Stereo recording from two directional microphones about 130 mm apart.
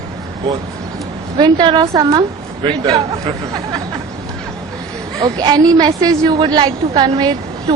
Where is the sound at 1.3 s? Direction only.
40° right (ahead or behind).